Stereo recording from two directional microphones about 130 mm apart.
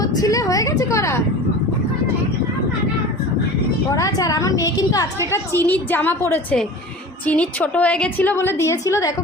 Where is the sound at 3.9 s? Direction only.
25° left (ahead or behind).